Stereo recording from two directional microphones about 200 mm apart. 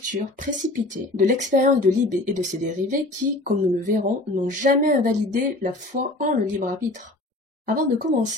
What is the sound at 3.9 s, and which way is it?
Speech, 40° right (ahead or behind).